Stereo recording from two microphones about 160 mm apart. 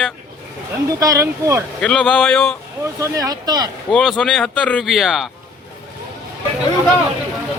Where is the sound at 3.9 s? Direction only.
5° left (ahead or behind).